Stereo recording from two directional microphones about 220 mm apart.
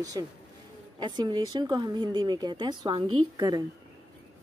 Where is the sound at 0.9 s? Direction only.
20° right (ahead or behind).